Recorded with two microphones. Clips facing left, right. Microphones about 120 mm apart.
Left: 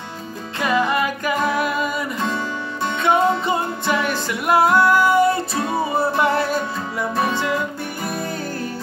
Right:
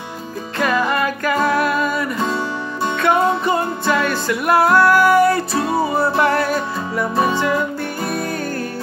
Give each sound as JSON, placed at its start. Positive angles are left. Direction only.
{"t": 0.7, "sound": "singing", "side_deg": 20}
{"t": 3.0, "sound": "music", "side_deg": 20}
{"t": 4.8, "sound": "music", "side_deg": -70}
{"t": 6.2, "sound": "music", "side_deg": 25}
{"t": 8.1, "sound": "music", "side_deg": 25}